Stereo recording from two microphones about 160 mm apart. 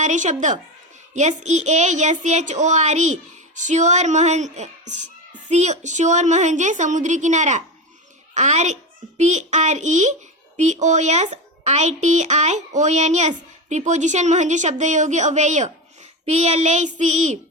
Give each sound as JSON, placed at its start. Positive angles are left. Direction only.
{"t": 0.0, "sound": "a woman's voice", "side_deg": -50}